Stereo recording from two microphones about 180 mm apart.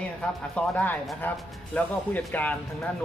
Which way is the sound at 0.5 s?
5° left (ahead or behind).